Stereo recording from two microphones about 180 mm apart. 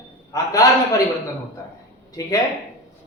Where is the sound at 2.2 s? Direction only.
20° left (ahead or behind).